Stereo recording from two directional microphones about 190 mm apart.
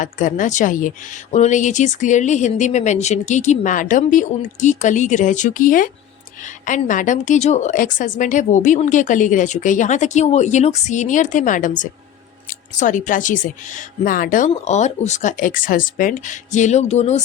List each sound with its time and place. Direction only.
0.0 s a woman's voice: 45° left (ahead or behind)